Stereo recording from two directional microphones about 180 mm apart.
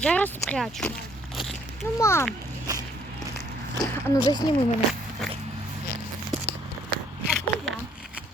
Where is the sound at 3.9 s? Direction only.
15° left (ahead or behind).